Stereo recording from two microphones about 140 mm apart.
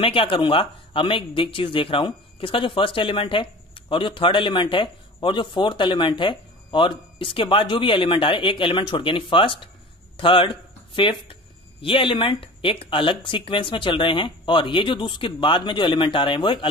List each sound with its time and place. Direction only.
0.0 s speech: 40° left (ahead or behind)